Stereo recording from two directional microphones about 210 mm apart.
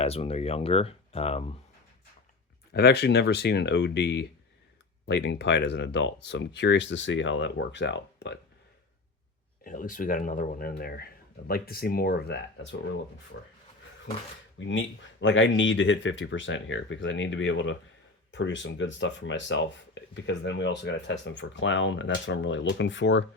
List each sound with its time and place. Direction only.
0.0 s speech: 30° left (ahead or behind)
2.7 s speech: 50° left (ahead or behind)
9.6 s speech: 40° left (ahead or behind)
13.3 s speech: 60° left (ahead or behind)
14.7 s speech: 65° left (ahead or behind)